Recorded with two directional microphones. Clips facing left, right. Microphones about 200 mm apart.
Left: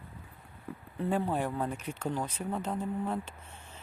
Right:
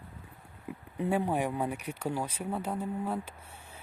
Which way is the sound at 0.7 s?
15° right (ahead or behind).